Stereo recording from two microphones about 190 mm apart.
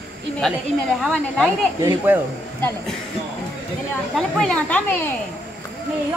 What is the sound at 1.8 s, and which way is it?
Speech, 15° right (ahead or behind).